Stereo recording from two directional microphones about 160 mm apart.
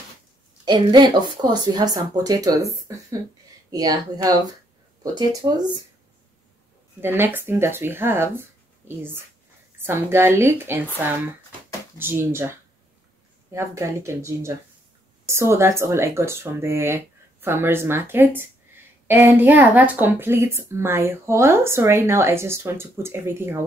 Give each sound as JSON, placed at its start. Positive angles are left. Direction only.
{"t": 0.7, "sound": "speech", "side_deg": -25}
{"t": 7.0, "sound": "speech", "side_deg": -15}